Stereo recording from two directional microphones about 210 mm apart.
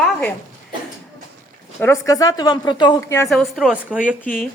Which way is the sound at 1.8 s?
15° left (ahead or behind).